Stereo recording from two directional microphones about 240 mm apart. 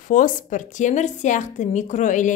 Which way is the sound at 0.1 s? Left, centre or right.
Left.